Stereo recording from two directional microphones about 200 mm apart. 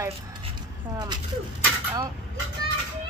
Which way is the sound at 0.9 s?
20° right (ahead or behind).